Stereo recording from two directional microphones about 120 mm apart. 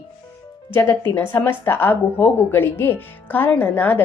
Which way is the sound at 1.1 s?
15° left (ahead or behind).